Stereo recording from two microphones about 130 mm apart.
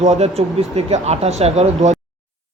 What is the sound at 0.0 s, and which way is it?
Speech, 60° right (ahead or behind).